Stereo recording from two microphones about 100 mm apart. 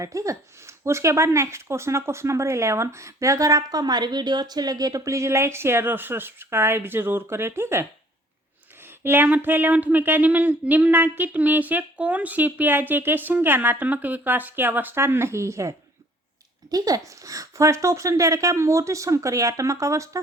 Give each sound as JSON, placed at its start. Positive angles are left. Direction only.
{"t": 0.0, "sound": "speech", "side_deg": -30}
{"t": 9.0, "sound": "speech", "side_deg": -20}